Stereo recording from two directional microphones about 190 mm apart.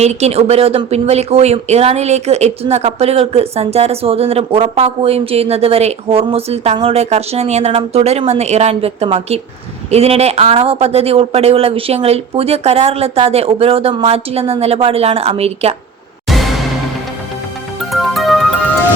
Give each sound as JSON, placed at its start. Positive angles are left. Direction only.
{"t": 0.0, "sound": "speech", "side_deg": -35}
{"t": 16.3, "sound": "music", "side_deg": 0}
{"t": 17.7, "sound": "music", "side_deg": 0}